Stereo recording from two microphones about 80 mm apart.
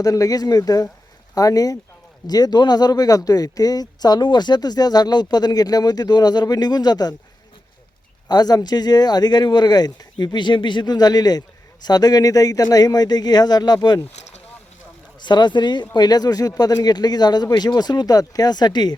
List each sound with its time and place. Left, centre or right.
0.0 s speech: left
8.3 s speech: left
15.2 s speech: left
16.0 s speech: left